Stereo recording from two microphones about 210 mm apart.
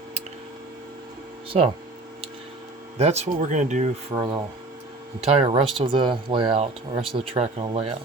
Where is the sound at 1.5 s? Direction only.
30° right (ahead or behind).